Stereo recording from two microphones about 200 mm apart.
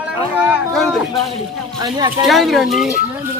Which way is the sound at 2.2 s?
Centre (ahead or behind).